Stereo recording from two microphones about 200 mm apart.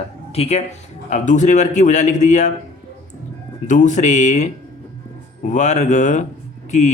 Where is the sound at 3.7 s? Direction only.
40° left (ahead or behind).